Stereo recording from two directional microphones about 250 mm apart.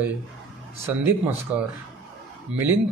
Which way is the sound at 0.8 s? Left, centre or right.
Centre.